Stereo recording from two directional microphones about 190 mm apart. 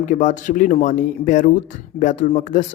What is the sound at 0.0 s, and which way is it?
Speech, 40° left (ahead or behind).